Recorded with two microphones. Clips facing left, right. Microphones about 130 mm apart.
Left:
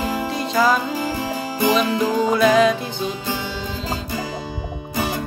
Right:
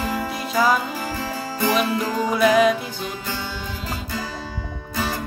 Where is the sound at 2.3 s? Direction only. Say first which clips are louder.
Even; 10° right (ahead or behind).